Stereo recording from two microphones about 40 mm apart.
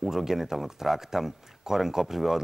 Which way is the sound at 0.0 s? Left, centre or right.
Centre.